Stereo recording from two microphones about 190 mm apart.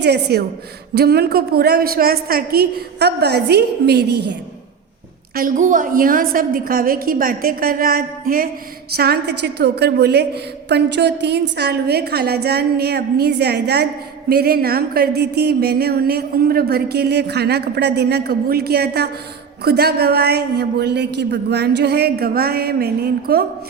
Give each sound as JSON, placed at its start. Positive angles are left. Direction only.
{"t": 0.0, "sound": "a woman's voice", "side_deg": -60}
{"t": 5.3, "sound": "a woman's voice", "side_deg": -45}